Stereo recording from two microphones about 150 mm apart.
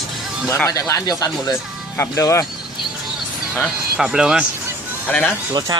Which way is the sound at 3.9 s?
5° right (ahead or behind).